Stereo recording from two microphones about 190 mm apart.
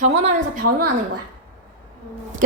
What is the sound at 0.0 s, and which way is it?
Speech, 40° right (ahead or behind).